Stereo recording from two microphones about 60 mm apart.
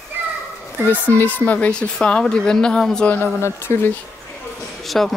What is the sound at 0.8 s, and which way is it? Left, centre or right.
Speech, left.